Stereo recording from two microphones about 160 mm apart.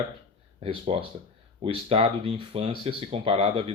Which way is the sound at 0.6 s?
35° right (ahead or behind).